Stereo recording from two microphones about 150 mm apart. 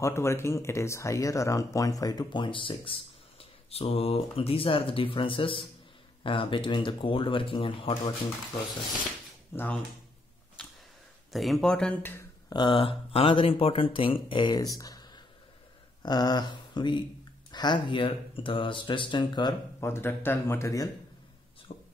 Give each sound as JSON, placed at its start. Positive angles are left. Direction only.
{"t": 0.0, "sound": "speech", "side_deg": 20}
{"t": 9.5, "sound": "speech", "side_deg": 15}
{"t": 11.3, "sound": "speech", "side_deg": 0}
{"t": 12.4, "sound": "speech", "side_deg": 30}
{"t": 14.8, "sound": "a sound", "side_deg": 25}
{"t": 16.0, "sound": "speech", "side_deg": 30}
{"t": 19.8, "sound": "speech", "side_deg": 15}
{"t": 21.7, "sound": "a sound", "side_deg": 45}